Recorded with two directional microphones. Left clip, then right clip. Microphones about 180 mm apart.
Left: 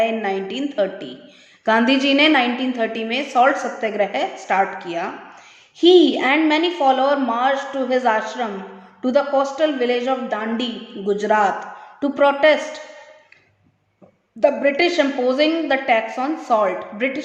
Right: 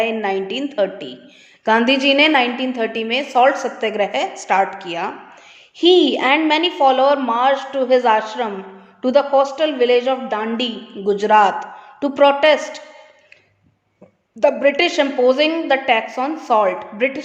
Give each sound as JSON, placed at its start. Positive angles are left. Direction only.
{"t": 0.0, "sound": "a woman's voice", "side_deg": -40}
{"t": 14.3, "sound": "a woman's voice", "side_deg": -45}